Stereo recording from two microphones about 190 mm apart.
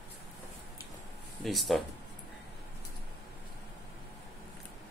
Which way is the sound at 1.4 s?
Centre (ahead or behind).